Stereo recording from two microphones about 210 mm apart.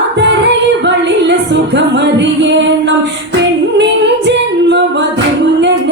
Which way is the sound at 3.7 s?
55° right (ahead or behind).